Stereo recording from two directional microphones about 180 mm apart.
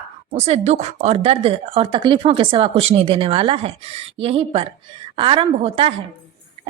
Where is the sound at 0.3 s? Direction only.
35° right (ahead or behind).